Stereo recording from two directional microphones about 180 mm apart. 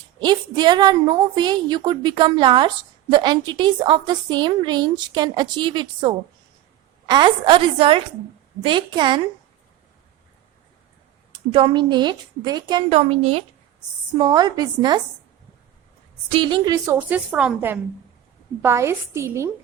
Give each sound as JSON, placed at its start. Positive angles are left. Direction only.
{"t": 0.2, "sound": "a woman's voice", "side_deg": -25}
{"t": 11.5, "sound": "a woman's voice", "side_deg": -25}
{"t": 16.3, "sound": "a woman's voice", "side_deg": -25}